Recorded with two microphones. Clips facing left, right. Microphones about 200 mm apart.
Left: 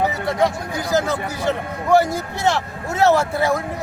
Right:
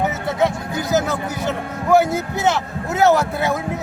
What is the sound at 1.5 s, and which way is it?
A man's voice, 5° right (ahead or behind).